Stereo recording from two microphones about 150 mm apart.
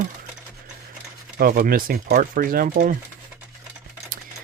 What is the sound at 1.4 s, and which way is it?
Speech, 70° right (ahead or behind).